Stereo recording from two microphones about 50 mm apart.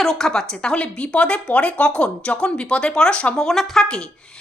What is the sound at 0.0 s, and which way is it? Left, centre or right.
Speech, centre.